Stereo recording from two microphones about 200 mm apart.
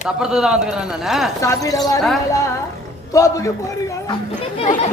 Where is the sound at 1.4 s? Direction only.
15° left (ahead or behind).